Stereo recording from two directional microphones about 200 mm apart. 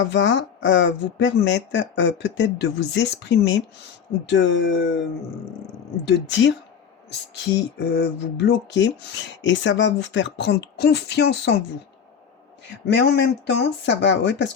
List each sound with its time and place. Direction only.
0.0 s speech: 65° left (ahead or behind)
6.1 s speech: 65° left (ahead or behind)
12.9 s speech: 60° left (ahead or behind)